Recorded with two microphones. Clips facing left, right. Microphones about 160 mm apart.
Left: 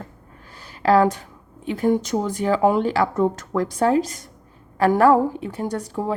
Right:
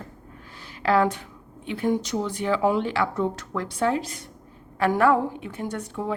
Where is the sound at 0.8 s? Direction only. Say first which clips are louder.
Left 5 dB; 40° left (ahead or behind).